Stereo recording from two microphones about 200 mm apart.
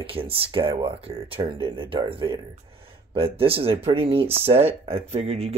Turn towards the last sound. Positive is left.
turn(degrees=-30)  # may be behind; listen again after turning